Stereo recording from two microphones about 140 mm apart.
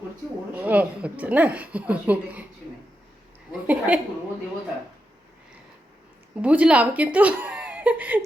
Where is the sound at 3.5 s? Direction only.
10° right (ahead or behind).